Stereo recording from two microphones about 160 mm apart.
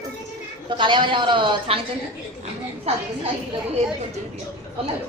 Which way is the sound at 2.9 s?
40° right (ahead or behind).